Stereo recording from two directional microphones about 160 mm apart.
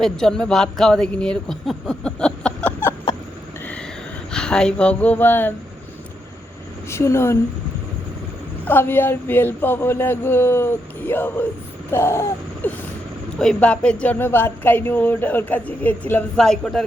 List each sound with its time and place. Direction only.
0.0 s speech: 5° left (ahead or behind)
4.3 s speech: 5° left (ahead or behind)
6.9 s speech: 15° left (ahead or behind)
8.6 s speech: 10° left (ahead or behind)